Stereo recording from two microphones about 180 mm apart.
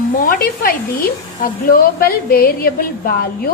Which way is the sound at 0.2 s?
50° left (ahead or behind).